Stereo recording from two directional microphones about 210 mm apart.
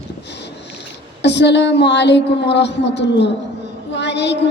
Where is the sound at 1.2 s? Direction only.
55° left (ahead or behind).